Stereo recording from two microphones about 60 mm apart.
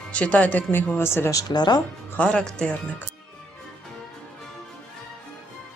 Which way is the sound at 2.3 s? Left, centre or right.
Centre.